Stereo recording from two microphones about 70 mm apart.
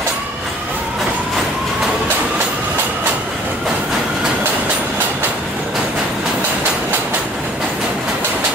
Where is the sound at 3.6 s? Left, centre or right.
Centre.